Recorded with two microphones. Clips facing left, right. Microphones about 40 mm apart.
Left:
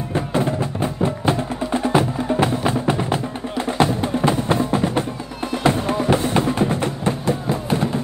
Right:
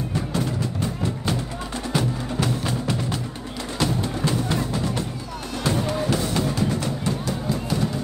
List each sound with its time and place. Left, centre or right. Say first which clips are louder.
0.1 s music: left 9 dB; left